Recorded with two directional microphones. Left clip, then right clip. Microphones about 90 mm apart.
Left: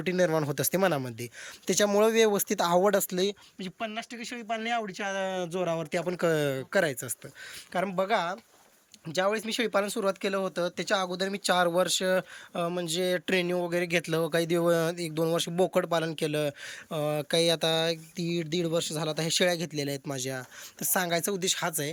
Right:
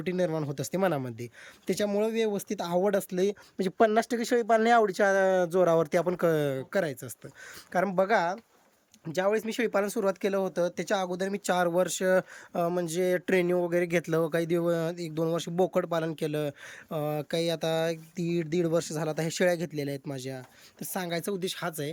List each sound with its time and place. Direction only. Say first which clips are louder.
0.0 s speech: left 3 dB; 15° right (ahead or behind)
0.8 s speech: even; 25° right (ahead or behind)
4.6 s speech: right 9 dB; 90° right
5.9 s speech: right 4 dB; 50° right (ahead or behind)
6.1 s speech: even; 30° right (ahead or behind)
7.7 s speech: right 2 dB; 50° right (ahead or behind)
9.0 s speech: right 1 dB; 40° right (ahead or behind)
14.3 s speech: left 2 dB; 25° right (ahead or behind)